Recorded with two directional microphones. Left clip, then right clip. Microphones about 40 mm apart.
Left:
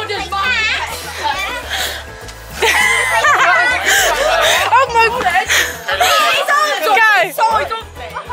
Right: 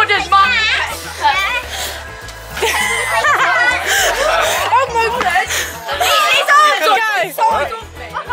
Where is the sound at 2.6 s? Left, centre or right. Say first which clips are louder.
Left 3 dB; left.